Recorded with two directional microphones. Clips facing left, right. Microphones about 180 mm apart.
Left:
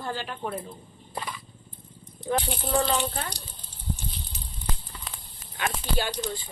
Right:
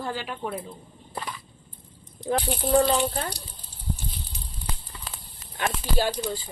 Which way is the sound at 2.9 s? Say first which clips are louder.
Right 3 dB; 35° right (ahead or behind).